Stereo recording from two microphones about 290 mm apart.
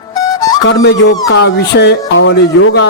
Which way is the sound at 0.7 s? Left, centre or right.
Left.